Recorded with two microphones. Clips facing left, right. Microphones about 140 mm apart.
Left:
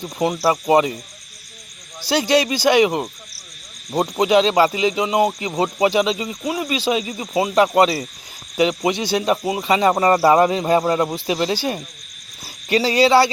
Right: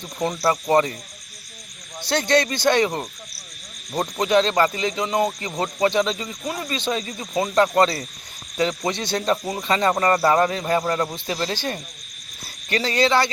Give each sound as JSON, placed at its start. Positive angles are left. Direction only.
{"t": 0.0, "sound": "speech", "side_deg": 10}
{"t": 2.0, "sound": "speech", "side_deg": 5}